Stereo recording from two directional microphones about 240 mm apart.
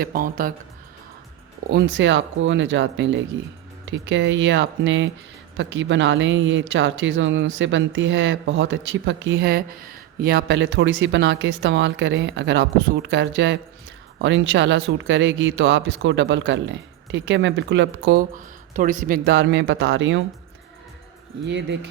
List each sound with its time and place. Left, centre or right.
0.0 s speech: right
1.7 s speech: right
21.4 s speech: right